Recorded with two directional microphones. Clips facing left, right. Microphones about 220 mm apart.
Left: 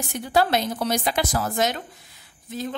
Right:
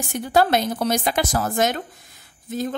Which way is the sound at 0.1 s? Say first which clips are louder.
Right 3 dB; 45° right (ahead or behind).